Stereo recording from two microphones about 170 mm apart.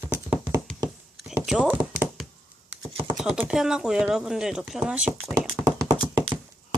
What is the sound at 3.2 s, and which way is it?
Speech, 5° right (ahead or behind).